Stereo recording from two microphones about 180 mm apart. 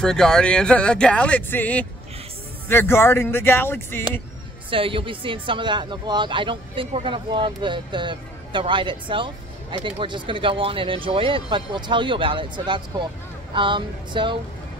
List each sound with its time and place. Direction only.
0.0 s speech: 5° left (ahead or behind)
4.6 s speech: 30° right (ahead or behind)